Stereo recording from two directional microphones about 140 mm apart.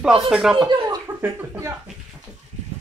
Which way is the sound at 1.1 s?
15° right (ahead or behind).